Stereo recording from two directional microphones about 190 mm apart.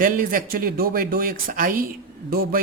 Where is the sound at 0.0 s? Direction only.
50° right (ahead or behind).